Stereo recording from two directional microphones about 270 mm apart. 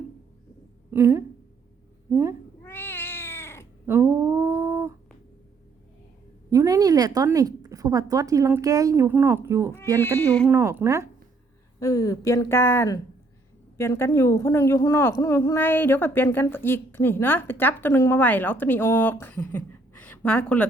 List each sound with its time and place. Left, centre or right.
0.9 s a woman's voice: centre
2.6 s cat: centre
3.8 s humming: centre
6.5 s a woman's voice: centre
10.0 s a woman's voice: centre
10.5 s a woman's voice: centre
11.8 s a woman's voice: centre